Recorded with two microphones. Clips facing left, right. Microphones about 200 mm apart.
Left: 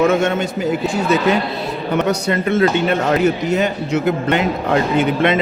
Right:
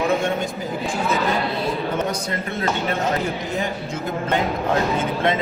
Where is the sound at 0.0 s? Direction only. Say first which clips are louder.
Left 6 dB; 80° left.